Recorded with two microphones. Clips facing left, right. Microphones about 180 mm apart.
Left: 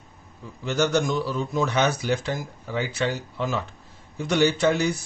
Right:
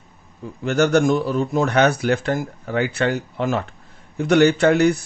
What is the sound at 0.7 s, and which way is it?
Speech, 60° right (ahead or behind).